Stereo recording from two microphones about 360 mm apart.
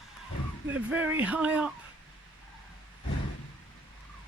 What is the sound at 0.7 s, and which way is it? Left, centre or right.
Speech, centre.